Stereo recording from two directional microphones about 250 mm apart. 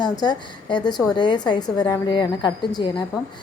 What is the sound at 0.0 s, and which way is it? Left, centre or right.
A woman's voice, centre.